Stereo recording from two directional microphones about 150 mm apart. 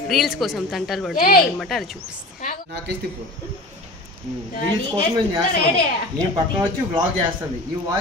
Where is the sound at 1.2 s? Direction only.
70° left (ahead or behind).